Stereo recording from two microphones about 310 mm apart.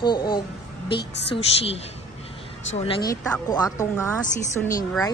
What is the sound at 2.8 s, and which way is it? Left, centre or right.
A man's voice, centre.